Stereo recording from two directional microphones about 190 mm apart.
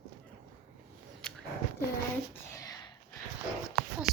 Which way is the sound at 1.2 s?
5° left (ahead or behind).